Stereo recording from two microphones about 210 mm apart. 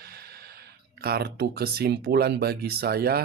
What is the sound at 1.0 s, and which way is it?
Speech, 50° right (ahead or behind).